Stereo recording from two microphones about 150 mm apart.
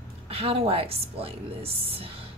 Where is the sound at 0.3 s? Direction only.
40° right (ahead or behind).